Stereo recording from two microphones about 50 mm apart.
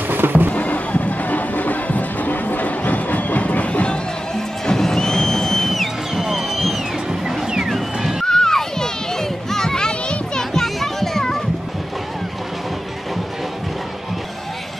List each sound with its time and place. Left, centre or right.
0.1 s a sound: right
0.5 s music: left
4.6 s music: centre
8.3 s children playing: centre